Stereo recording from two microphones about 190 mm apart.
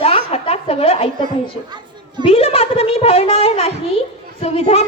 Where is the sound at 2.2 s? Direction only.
30° left (ahead or behind).